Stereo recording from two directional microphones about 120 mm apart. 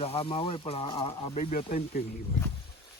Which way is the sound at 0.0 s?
55° left (ahead or behind).